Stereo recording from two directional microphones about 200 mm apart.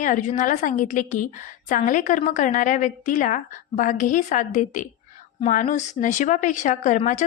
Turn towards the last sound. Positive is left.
turn(degrees=40)  # may be behind; listen again after turning